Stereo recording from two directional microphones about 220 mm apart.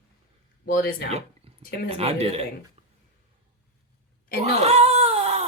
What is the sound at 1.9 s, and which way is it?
Speech, 30° right (ahead or behind).